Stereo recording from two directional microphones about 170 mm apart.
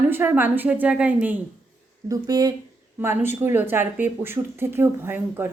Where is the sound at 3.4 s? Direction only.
10° right (ahead or behind).